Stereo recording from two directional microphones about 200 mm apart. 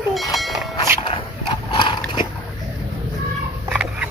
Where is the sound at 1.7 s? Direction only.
25° left (ahead or behind).